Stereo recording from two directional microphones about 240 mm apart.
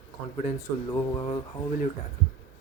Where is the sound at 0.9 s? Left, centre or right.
Left.